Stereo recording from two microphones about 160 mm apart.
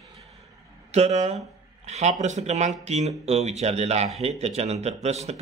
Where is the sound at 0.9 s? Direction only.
45° right (ahead or behind).